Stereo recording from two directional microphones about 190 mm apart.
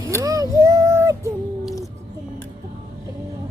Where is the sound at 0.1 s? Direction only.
15° right (ahead or behind).